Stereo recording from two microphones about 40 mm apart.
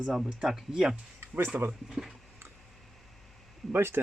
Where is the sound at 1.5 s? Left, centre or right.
Right.